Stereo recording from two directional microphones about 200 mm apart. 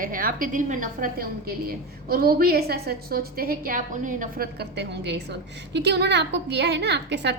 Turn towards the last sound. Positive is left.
turn(degrees=-60)  # may be behind; listen again after turning